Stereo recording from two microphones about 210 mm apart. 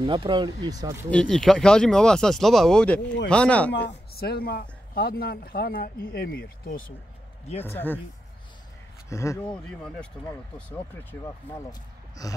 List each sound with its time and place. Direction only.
0.0 s speech: 25° right (ahead or behind)
1.1 s speech: 5° left (ahead or behind)
3.7 s speech: 50° left (ahead or behind)
7.6 s speech: 10° left (ahead or behind)
9.1 s speech: 15° left (ahead or behind)